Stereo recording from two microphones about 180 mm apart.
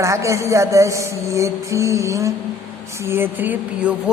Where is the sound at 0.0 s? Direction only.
15° right (ahead or behind).